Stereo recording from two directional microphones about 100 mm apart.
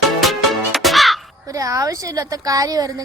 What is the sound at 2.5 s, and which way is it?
Speech, 35° right (ahead or behind).